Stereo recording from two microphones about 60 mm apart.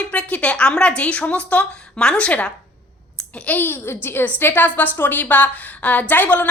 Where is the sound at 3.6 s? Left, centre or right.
Left.